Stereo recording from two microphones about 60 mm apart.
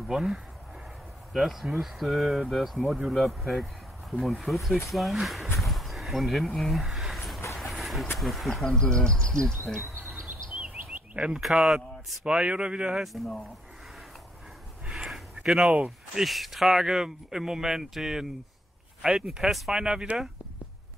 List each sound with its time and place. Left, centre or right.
0.0 s speech: centre
7.5 s vehicle: centre
8.2 s speech: centre
8.7 s speech: centre
9.9 s chirp: right
10.9 s a sound: centre
11.4 s speech: centre
12.3 s speech: centre
13.0 s speech: centre
14.9 s a sound: centre
16.2 s speech: centre